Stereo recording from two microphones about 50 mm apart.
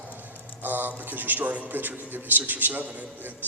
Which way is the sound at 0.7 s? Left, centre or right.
Right.